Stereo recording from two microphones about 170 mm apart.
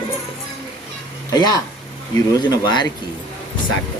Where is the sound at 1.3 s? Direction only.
25° left (ahead or behind).